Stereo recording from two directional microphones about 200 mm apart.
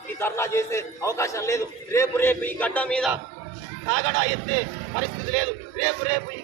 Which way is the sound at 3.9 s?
65° right (ahead or behind).